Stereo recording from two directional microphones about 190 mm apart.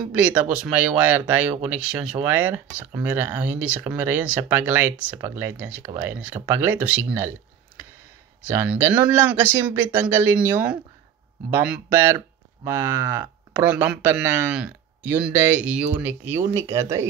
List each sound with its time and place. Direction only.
0.0 s speech: 5° right (ahead or behind)
8.5 s speech: 10° right (ahead or behind)